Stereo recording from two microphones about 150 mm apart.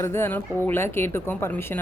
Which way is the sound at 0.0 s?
15° left (ahead or behind).